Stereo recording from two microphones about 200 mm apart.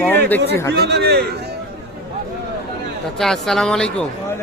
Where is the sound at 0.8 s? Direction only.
55° right (ahead or behind).